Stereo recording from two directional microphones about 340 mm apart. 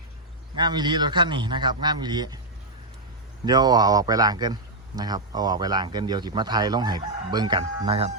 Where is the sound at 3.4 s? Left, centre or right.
Centre.